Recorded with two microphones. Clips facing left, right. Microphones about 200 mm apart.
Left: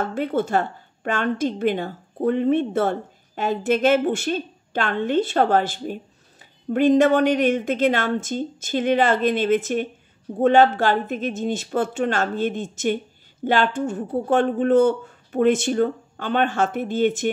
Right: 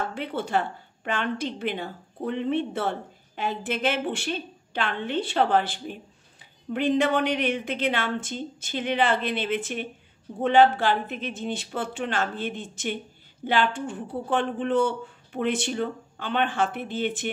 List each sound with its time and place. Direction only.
0.1 s speech: 45° left (ahead or behind)